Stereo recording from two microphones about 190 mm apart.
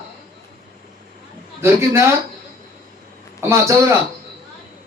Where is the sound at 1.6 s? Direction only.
15° right (ahead or behind).